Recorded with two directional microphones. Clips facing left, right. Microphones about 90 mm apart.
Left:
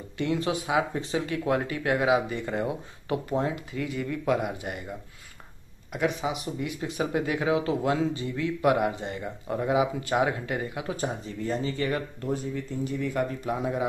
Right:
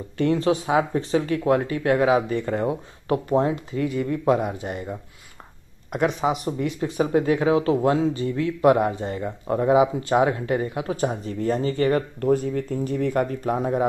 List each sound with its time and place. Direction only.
0.2 s speech: 35° right (ahead or behind)
6.0 s speech: 35° right (ahead or behind)